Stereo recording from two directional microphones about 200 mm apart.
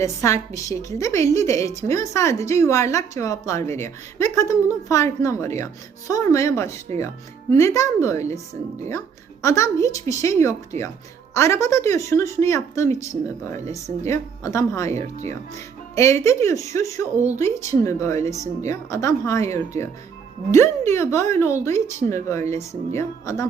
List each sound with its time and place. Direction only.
0.0 s a woman's voice: 15° left (ahead or behind)
14.9 s speech: 35° right (ahead or behind)
16.0 s a woman's voice: 15° left (ahead or behind)